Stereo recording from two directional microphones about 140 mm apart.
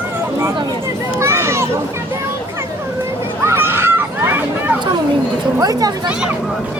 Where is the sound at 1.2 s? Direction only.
20° right (ahead or behind).